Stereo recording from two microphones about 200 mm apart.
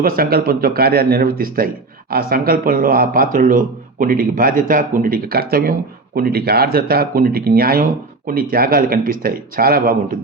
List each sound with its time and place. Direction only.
0.0 s speech: 50° right (ahead or behind)